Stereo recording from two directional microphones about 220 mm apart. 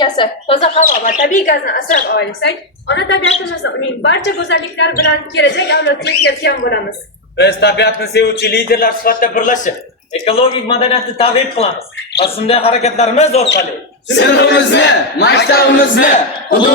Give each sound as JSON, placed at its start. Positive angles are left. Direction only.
{"t": 0.0, "sound": "a man's voice", "side_deg": 25}
{"t": 14.2, "sound": "a woman's voice", "side_deg": 55}